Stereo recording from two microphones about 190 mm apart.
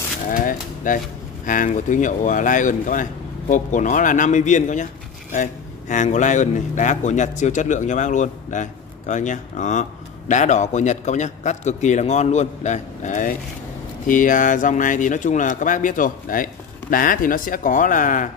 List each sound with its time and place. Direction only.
0.3 s speech: 45° left (ahead or behind)